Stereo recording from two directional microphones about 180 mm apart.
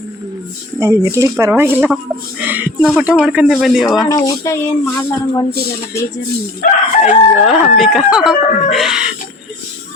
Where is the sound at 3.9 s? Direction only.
20° left (ahead or behind).